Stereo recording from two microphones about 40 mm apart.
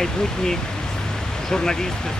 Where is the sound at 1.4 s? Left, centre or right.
Centre.